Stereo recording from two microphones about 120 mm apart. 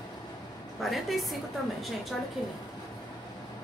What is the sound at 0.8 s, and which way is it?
Speech, centre (ahead or behind).